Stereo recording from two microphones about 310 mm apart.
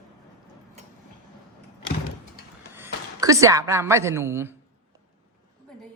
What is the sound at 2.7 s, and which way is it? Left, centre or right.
A woman's voice, centre.